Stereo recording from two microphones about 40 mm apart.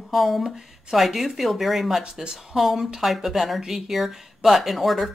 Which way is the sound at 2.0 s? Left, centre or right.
Right.